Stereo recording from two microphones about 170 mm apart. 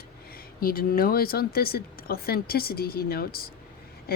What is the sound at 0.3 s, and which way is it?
Speech, 60° left (ahead or behind).